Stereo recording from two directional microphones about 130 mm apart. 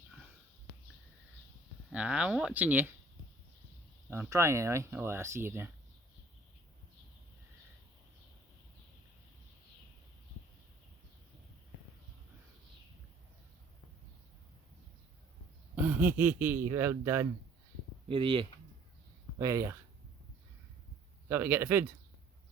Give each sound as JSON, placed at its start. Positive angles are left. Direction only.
{"t": 1.9, "sound": "speech", "side_deg": -10}
{"t": 4.1, "sound": "speech", "side_deg": -20}
{"t": 15.7, "sound": "a sound", "side_deg": -15}
{"t": 16.7, "sound": "speech", "side_deg": -20}
{"t": 18.1, "sound": "speech", "side_deg": -40}
{"t": 19.4, "sound": "speech", "side_deg": -25}
{"t": 21.2, "sound": "speech", "side_deg": -15}